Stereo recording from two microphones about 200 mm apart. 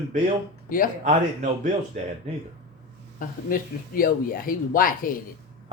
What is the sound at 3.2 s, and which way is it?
Speech, 45° left (ahead or behind).